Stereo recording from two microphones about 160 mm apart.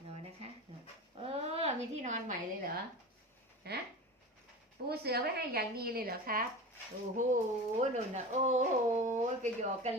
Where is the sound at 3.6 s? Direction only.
90° right.